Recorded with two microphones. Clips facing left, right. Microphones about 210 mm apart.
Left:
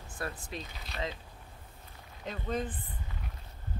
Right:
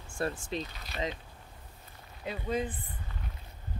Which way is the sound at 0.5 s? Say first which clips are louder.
Right 6 dB; 25° right (ahead or behind).